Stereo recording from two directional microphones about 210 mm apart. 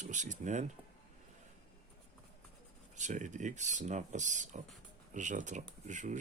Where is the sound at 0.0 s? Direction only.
35° right (ahead or behind).